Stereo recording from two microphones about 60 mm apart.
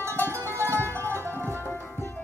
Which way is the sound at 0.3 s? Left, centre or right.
Right.